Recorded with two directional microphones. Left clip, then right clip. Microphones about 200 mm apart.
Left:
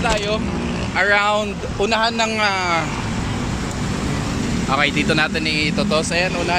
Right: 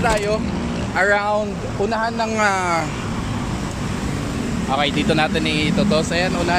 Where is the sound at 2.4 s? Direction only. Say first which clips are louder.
Right 4 dB; 15° right (ahead or behind).